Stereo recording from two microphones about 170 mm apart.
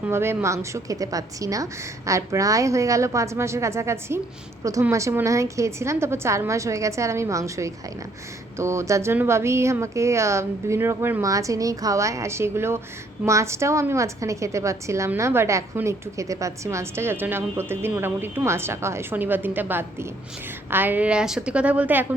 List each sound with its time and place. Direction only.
0.0 s a woman's voice: 15° right (ahead or behind)